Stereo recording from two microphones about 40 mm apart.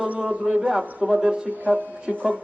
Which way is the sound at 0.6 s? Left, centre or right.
Centre.